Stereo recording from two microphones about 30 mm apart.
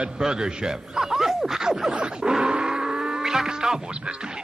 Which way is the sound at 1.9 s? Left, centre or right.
Right.